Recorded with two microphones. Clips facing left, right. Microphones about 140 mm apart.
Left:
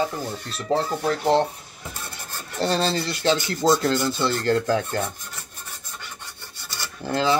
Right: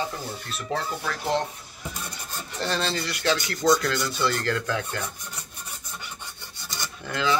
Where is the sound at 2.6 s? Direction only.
30° left (ahead or behind).